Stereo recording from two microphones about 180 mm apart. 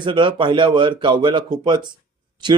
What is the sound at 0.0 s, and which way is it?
Speech, 25° right (ahead or behind).